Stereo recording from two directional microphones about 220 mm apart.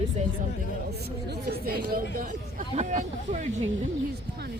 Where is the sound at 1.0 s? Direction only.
45° right (ahead or behind).